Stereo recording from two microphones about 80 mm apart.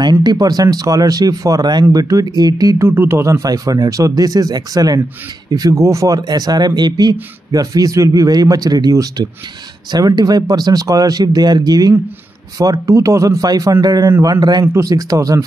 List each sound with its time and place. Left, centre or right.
0.0 s a man's voice: right
2.8 s a man's voice: right
5.8 s a man's voice: right
13.7 s a man's voice: right
14.7 s a man's voice: right